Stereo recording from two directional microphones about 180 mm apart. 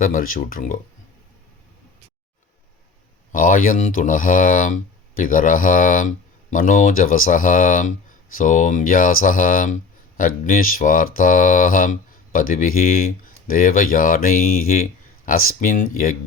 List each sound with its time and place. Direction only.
0.0 s speech: 50° left (ahead or behind)
3.3 s speech: 50° left (ahead or behind)